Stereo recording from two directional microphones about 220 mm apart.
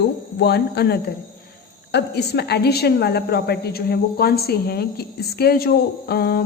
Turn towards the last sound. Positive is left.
turn(degrees=45)  # may be behind; listen again after turning